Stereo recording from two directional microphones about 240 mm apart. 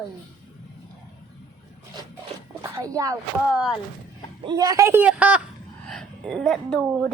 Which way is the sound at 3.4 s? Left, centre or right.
Centre.